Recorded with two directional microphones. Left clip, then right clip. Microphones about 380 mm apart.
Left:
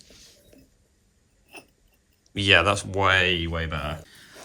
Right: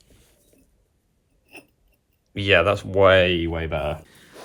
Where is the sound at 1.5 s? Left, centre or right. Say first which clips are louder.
Right 1 dB; centre.